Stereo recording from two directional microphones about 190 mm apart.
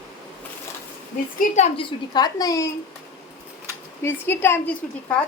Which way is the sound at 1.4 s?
35° left (ahead or behind).